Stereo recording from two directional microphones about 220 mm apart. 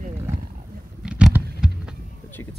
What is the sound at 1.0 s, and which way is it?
Vehicle, 5° right (ahead or behind).